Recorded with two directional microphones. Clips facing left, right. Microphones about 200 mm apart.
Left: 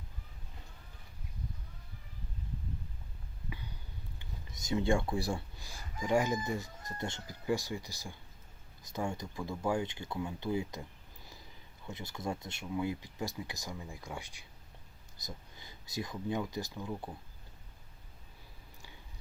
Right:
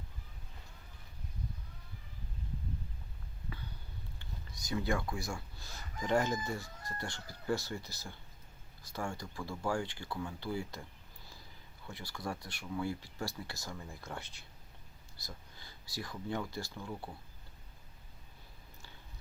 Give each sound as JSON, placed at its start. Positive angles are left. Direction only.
{"t": 4.2, "sound": "a sound", "side_deg": 20}
{"t": 5.5, "sound": "speech", "side_deg": 10}
{"t": 11.9, "sound": "speech", "side_deg": 20}